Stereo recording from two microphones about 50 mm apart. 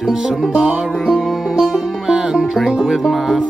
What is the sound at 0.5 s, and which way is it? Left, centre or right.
Music, right.